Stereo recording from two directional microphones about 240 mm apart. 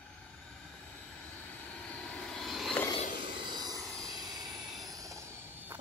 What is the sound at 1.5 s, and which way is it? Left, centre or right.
Vehicle, centre.